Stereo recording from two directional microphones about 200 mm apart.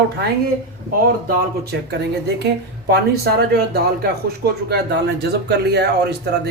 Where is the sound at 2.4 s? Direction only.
55° right (ahead or behind).